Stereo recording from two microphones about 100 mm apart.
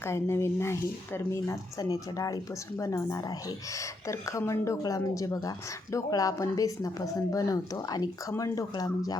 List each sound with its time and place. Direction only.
0.0 s speech: 25° left (ahead or behind)